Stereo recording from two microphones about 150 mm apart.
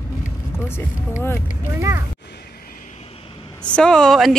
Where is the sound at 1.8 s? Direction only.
20° right (ahead or behind).